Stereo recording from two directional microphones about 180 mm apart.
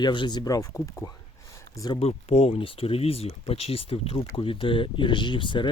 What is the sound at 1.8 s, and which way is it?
Speech, 30° left (ahead or behind).